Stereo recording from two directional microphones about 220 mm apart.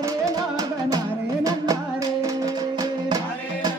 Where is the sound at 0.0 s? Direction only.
15° right (ahead or behind).